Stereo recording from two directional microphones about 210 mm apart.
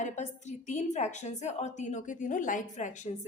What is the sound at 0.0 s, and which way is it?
A woman's voice, 35° left (ahead or behind).